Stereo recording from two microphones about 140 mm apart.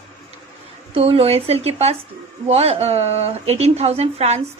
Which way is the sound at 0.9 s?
40° right (ahead or behind).